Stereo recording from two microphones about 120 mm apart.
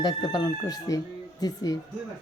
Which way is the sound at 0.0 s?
35° left (ahead or behind).